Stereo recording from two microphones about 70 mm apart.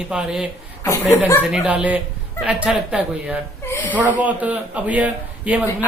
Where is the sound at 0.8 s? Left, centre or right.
Left.